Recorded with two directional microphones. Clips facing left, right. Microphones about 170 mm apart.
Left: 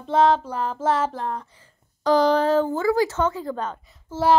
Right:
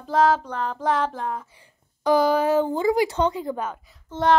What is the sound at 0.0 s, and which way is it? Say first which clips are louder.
A child's voice: left 1 dB; centre (ahead or behind).